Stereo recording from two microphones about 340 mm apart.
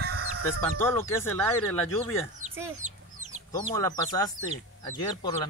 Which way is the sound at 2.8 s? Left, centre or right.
Right.